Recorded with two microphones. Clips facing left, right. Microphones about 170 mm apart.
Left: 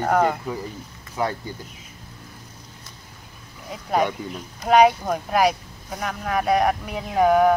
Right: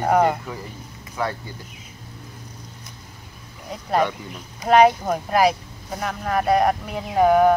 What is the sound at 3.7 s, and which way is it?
Speech, 5° left (ahead or behind).